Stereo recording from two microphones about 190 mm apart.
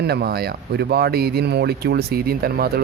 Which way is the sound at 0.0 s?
60° right (ahead or behind).